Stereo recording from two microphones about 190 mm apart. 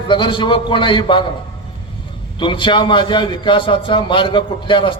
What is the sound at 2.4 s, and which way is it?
A man's voice, 25° left (ahead or behind).